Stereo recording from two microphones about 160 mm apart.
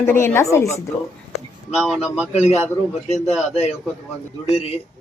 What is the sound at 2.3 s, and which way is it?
A man's voice, 45° left (ahead or behind).